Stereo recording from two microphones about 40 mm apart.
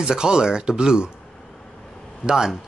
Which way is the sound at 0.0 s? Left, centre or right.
Centre.